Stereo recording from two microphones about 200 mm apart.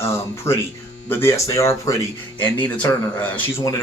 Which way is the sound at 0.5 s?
15° left (ahead or behind).